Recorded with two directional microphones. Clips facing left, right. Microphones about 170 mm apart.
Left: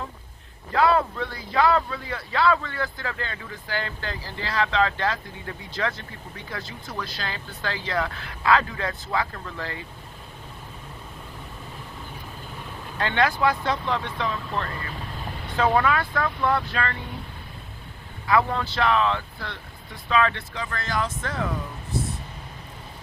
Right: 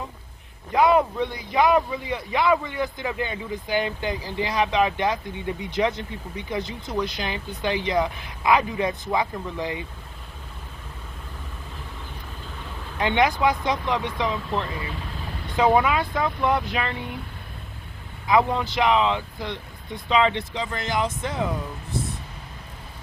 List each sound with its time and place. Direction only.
0.7 s a man's voice: 15° right (ahead or behind)
13.0 s a man's voice: 15° right (ahead or behind)
18.3 s a man's voice: 15° right (ahead or behind)